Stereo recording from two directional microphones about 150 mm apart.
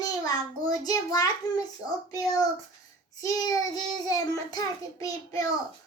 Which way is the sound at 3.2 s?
25° left (ahead or behind).